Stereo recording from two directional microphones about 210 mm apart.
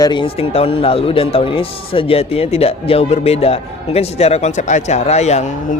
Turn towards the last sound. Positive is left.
turn(degrees=35)  # may be behind; listen again after turning